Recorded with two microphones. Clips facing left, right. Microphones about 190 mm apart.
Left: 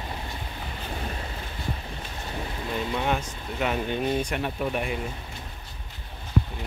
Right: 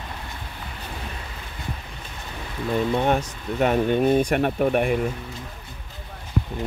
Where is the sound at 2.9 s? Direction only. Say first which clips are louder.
Right 5 dB; 40° right (ahead or behind).